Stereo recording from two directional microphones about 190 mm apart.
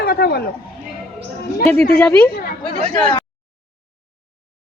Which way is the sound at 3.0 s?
25° left (ahead or behind).